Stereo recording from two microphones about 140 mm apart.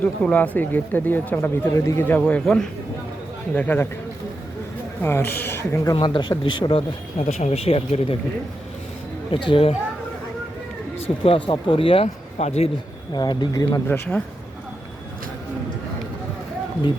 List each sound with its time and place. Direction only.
0.0 s speech: 10° left (ahead or behind)
5.0 s speech: 15° left (ahead or behind)
6.0 s speech: 35° left (ahead or behind)
7.3 s speech: 50° left (ahead or behind)
9.3 s speech: 40° left (ahead or behind)
11.3 s speech: 35° left (ahead or behind)
12.0 s speech: 50° left (ahead or behind)
13.1 s speech: 30° left (ahead or behind)
13.8 s speech: 15° left (ahead or behind)